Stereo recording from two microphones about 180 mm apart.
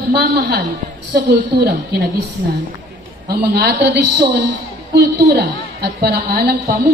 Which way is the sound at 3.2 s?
65° right (ahead or behind).